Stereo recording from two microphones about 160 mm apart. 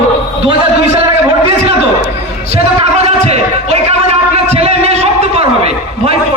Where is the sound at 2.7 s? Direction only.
40° right (ahead or behind).